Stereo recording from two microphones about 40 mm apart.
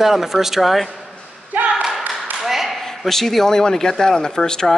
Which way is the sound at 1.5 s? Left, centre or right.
Right.